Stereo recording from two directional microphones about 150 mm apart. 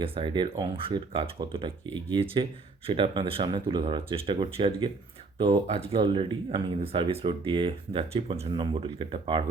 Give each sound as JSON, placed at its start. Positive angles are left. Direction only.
{"t": 0.0, "sound": "speech", "side_deg": -35}